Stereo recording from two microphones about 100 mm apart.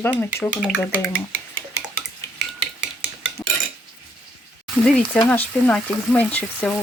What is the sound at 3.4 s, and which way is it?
Cutlery, 20° left (ahead or behind).